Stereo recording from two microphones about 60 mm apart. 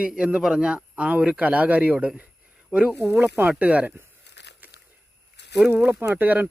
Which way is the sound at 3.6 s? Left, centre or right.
Right.